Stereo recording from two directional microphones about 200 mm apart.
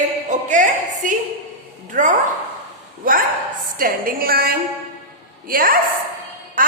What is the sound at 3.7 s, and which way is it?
A woman's voice, 45° right (ahead or behind).